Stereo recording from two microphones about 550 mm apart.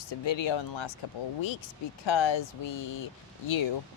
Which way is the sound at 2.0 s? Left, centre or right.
Left.